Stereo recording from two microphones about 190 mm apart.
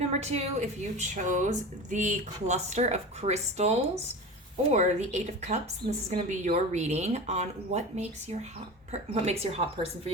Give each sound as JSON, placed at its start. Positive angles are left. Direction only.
{"t": 0.0, "sound": "a woman's voice", "side_deg": -35}